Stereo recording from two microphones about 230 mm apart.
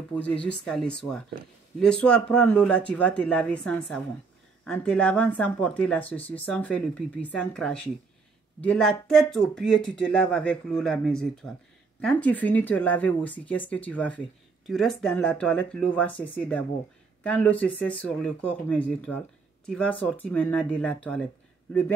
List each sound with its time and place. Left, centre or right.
0.7 s speech: centre